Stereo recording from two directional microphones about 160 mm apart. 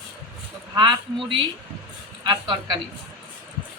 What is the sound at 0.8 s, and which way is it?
A man's voice, 30° right (ahead or behind).